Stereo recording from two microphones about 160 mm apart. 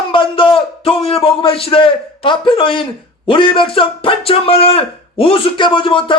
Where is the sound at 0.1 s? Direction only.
30° left (ahead or behind).